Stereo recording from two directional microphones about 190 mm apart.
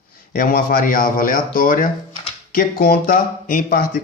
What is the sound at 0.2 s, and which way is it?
Speech, 50° left (ahead or behind).